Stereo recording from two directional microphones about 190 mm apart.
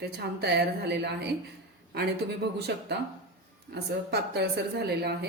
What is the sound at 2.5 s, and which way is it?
A woman's voice, 60° right (ahead or behind).